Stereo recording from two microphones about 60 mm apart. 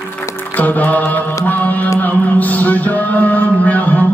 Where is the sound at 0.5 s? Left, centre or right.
Left.